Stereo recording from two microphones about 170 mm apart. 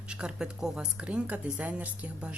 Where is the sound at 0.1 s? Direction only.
5° right (ahead or behind).